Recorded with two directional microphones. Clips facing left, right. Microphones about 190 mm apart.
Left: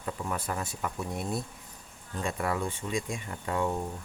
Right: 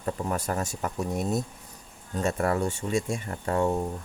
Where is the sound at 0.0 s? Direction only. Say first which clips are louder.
Right 5 dB; 40° right (ahead or behind).